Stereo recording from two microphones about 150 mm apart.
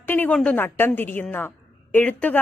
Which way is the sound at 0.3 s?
10° left (ahead or behind).